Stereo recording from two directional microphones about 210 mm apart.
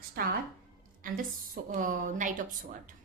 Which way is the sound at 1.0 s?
40° right (ahead or behind).